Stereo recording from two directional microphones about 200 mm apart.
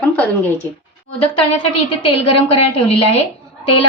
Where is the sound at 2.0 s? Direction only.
30° left (ahead or behind).